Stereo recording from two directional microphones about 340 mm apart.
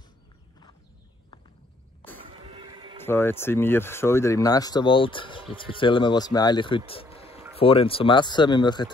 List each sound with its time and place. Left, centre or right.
2.4 s music: centre
3.0 s speech: centre
6.9 s a sound: centre
7.5 s speech: centre